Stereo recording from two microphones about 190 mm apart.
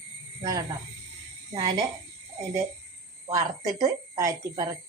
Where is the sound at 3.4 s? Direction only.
20° right (ahead or behind).